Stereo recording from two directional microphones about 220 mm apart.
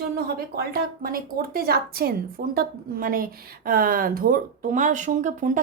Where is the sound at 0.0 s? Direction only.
45° right (ahead or behind).